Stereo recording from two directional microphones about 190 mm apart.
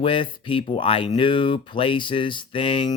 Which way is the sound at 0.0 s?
25° left (ahead or behind).